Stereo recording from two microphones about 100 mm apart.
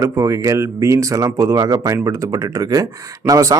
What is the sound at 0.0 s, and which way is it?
Speech, 30° right (ahead or behind).